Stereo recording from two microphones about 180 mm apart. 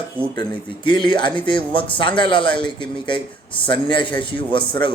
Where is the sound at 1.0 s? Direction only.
25° left (ahead or behind).